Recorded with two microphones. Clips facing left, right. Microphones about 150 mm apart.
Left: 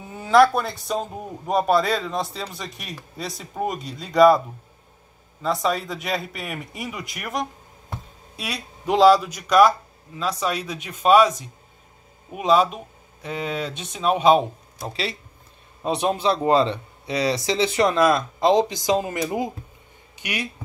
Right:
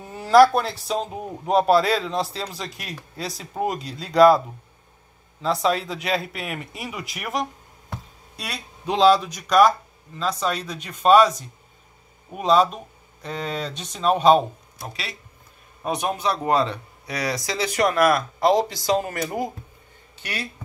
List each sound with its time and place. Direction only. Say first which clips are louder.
0.2 s a sound: right 2 dB; centre (ahead or behind)
1.1 s a man's voice: right 5 dB; 5° right (ahead or behind)
5.4 s a man's voice: right 1 dB; centre (ahead or behind)
8.4 s a man's voice: left 2 dB; 10° left (ahead or behind)
14.9 s speech: left 8 dB; 30° left (ahead or behind)